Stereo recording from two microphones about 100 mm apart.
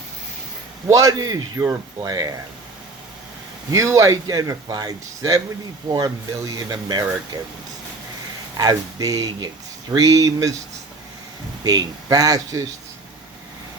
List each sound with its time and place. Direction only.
0.9 s a man's voice: 35° right (ahead or behind)
3.7 s a man's voice: 30° right (ahead or behind)
6.6 s a man's voice: 40° right (ahead or behind)
8.5 s a man's voice: 40° right (ahead or behind)
11.6 s a man's voice: 40° right (ahead or behind)